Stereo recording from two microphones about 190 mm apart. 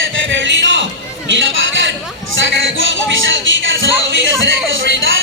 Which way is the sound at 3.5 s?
85° right.